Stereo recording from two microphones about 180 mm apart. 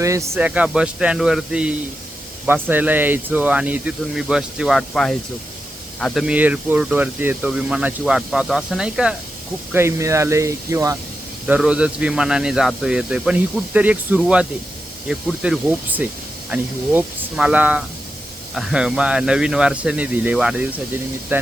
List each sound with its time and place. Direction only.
0.0 s speech: 15° right (ahead or behind)
9.7 s speech: 15° right (ahead or behind)